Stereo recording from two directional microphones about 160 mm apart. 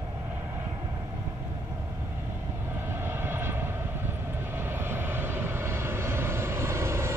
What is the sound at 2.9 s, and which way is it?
Vehicle, 15° right (ahead or behind).